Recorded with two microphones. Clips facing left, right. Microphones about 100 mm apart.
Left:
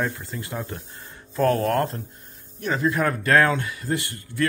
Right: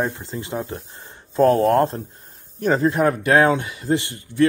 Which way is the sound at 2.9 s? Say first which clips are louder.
Right 3 dB; 20° right (ahead or behind).